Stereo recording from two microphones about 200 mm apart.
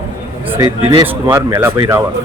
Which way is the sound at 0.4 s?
10° right (ahead or behind).